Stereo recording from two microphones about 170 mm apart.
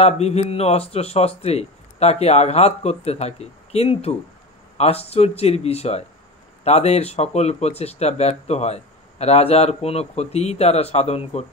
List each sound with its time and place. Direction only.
0.0 s speech: 40° left (ahead or behind)